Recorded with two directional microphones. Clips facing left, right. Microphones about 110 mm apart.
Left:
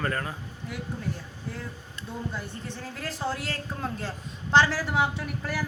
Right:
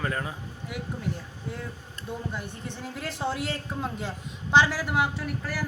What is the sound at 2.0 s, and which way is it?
Speech, 40° right (ahead or behind).